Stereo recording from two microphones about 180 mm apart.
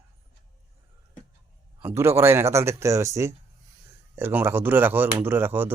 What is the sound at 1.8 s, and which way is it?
Speech, 15° right (ahead or behind).